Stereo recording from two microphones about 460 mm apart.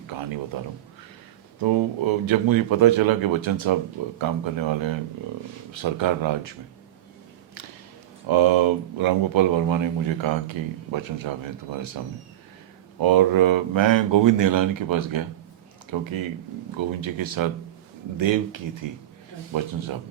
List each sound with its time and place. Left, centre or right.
0.1 s a sound: right
1.6 s a man's voice: right
8.3 s a man's voice: right
13.0 s a man's voice: right